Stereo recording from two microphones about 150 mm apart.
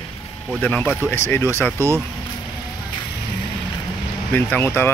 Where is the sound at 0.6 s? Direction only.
10° left (ahead or behind).